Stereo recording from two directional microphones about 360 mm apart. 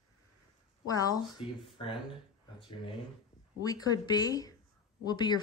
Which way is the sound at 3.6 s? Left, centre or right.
Centre.